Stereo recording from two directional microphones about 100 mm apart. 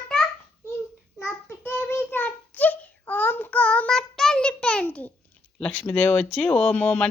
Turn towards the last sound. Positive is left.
turn(degrees=15)  # may be behind; listen again after turning